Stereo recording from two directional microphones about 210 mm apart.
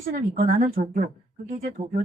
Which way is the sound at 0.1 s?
45° right (ahead or behind).